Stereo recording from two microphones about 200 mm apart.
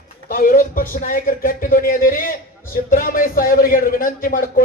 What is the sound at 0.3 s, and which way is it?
A man's voice, 45° left (ahead or behind).